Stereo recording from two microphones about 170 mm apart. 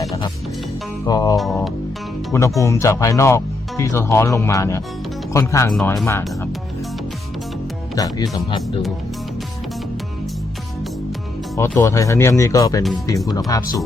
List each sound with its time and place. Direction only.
1.0 s speech: 20° left (ahead or behind)
7.9 s speech: 20° left (ahead or behind)
11.5 s speech: 15° left (ahead or behind)